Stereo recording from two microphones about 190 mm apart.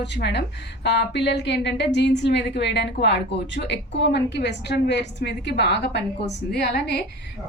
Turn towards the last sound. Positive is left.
turn(degrees=60)  # may be behind; listen again after turning